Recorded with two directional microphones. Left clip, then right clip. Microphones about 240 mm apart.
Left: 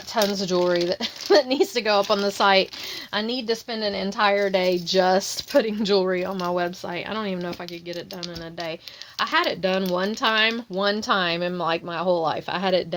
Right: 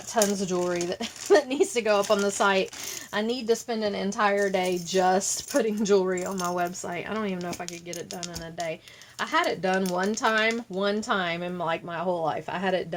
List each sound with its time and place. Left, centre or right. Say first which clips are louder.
0.1 s a woman's voice: left 3 dB; left
9.1 s a woman's voice: left 3 dB; left